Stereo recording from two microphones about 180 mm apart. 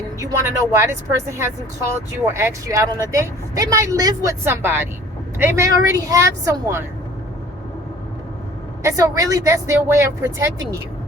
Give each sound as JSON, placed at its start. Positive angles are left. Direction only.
{"t": 0.2, "sound": "speech", "side_deg": -15}
{"t": 8.8, "sound": "speech", "side_deg": -20}